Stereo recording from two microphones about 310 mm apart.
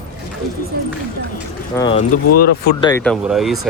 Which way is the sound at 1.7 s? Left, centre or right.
Centre.